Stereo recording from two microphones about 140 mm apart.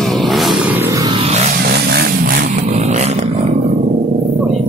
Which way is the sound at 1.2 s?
50° right (ahead or behind).